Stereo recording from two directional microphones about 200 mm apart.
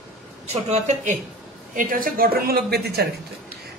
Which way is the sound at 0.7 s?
40° right (ahead or behind).